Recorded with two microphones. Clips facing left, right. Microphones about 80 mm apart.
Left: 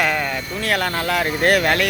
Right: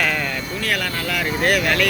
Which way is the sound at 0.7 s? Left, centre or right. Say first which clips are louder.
Left 4 dB; left.